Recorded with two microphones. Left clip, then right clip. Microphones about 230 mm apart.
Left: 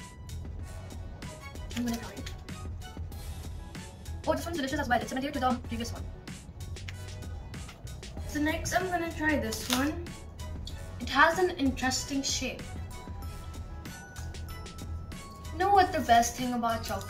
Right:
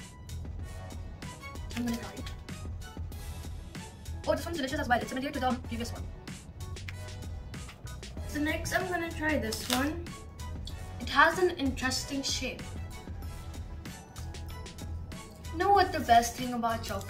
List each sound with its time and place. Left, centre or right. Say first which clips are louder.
1.8 s a woman's voice: left 1 dB; centre
3.7 s speech: right 1 dB; centre
8.5 s a woman's voice: left 2 dB; centre
15.7 s a woman's voice: even; centre